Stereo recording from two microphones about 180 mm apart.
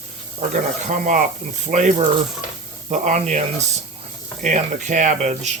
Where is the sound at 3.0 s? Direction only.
40° right (ahead or behind).